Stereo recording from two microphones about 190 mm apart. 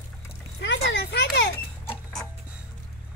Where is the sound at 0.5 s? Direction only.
65° left (ahead or behind).